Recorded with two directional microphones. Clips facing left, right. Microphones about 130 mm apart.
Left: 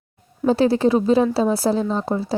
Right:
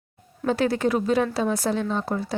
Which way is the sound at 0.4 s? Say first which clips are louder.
Left 6 dB; 30° left (ahead or behind).